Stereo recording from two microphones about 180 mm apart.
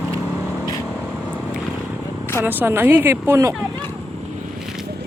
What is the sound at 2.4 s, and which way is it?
Speech, 10° right (ahead or behind).